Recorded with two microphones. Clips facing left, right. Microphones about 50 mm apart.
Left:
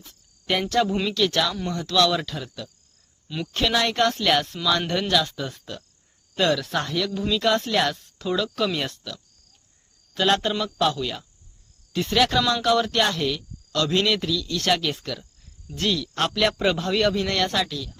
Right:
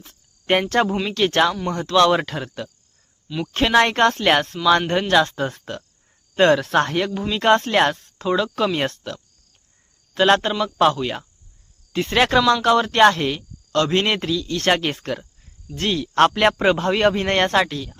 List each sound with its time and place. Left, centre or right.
0.0 s cricket: right
1.1 s speech: right
3.5 s speech: right
8.8 s speech: right
10.2 s speech: right